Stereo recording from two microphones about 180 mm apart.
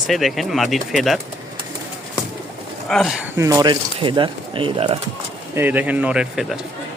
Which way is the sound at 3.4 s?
20° right (ahead or behind).